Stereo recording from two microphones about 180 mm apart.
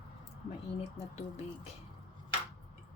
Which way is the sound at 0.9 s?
35° left (ahead or behind).